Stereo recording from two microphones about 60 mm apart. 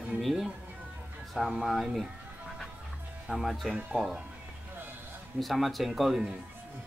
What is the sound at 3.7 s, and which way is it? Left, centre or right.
Speech, centre.